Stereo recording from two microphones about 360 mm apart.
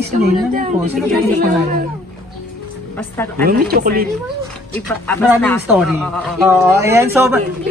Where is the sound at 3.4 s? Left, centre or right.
Right.